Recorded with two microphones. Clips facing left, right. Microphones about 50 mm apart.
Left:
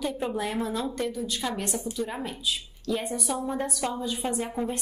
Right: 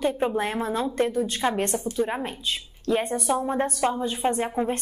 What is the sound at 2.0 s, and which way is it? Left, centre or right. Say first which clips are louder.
A woman's voice: right 5 dB; right.